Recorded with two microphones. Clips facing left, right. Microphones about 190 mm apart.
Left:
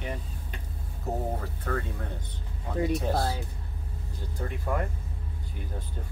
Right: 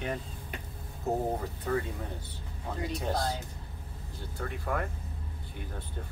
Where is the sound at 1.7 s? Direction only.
15° right (ahead or behind).